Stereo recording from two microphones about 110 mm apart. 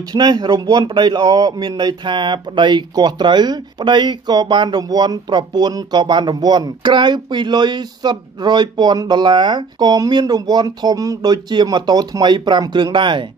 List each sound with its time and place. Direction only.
0.1 s a man's voice: 40° right (ahead or behind)